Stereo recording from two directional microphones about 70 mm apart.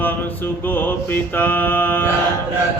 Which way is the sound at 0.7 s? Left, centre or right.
Left.